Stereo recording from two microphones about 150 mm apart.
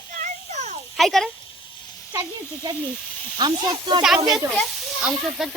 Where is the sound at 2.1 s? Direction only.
20° right (ahead or behind).